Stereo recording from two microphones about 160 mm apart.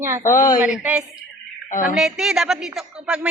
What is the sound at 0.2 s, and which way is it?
Speech, 15° left (ahead or behind).